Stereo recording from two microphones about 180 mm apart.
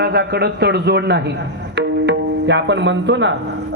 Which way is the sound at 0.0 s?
65° right (ahead or behind).